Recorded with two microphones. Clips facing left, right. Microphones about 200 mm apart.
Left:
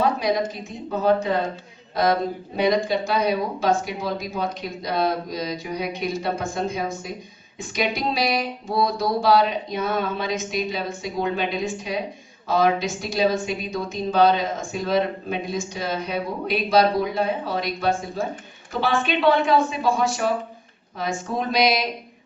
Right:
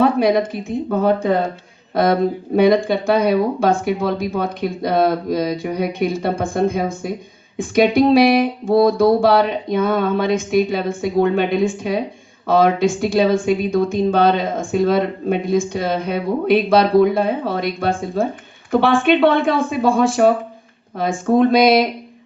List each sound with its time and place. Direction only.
0.0 s a sound: 55° right (ahead or behind)
0.9 s speech: 55° right (ahead or behind)
2.6 s speech: 55° right (ahead or behind)